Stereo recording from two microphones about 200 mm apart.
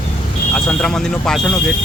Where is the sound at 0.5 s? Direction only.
Centre (ahead or behind).